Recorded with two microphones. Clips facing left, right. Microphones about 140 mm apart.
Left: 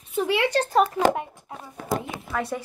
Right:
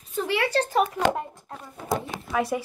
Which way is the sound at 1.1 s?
5° left (ahead or behind).